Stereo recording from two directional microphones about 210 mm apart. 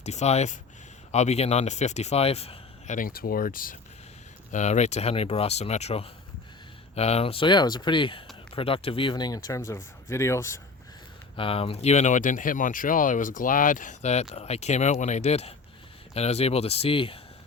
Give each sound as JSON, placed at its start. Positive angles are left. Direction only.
{"t": 0.0, "sound": "speech", "side_deg": 30}
{"t": 11.3, "sound": "speech", "side_deg": 25}